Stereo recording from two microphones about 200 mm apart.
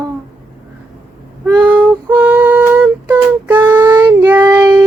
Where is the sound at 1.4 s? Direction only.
5° right (ahead or behind).